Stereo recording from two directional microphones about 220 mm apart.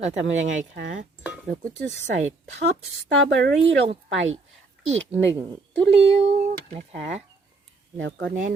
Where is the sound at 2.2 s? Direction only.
30° right (ahead or behind).